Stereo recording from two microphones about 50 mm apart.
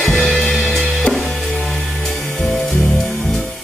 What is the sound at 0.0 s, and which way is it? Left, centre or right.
Music, centre.